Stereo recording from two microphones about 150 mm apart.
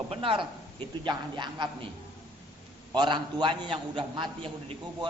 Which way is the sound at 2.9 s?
30° right (ahead or behind).